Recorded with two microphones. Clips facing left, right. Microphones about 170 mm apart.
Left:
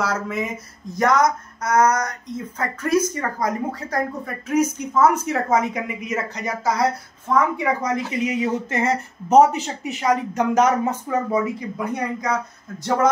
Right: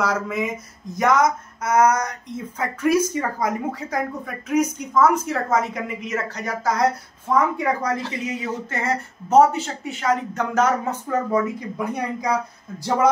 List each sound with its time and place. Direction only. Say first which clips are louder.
0.0 s a woman's voice: right 1 dB; centre (ahead or behind)
8.2 s speech: left 5 dB; 20° left (ahead or behind)
11.9 s a woman's voice: right 1 dB; 5° right (ahead or behind)